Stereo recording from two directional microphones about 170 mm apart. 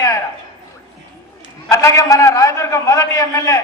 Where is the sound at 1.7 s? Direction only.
15° left (ahead or behind).